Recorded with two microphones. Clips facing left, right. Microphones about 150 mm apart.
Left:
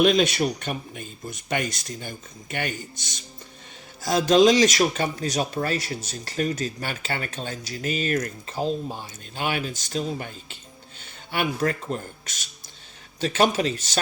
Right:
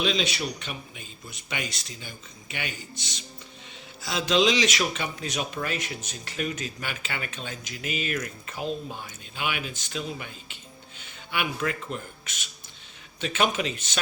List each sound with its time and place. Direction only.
0.0 s speech: 50° left (ahead or behind)